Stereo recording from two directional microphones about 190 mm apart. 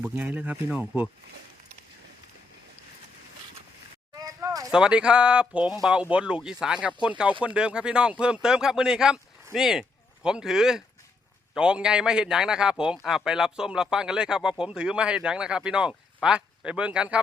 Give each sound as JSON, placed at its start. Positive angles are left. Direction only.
{"t": 0.0, "sound": "speech", "side_deg": -10}
{"t": 4.2, "sound": "a sound", "side_deg": -15}
{"t": 4.7, "sound": "a man's voice", "side_deg": -5}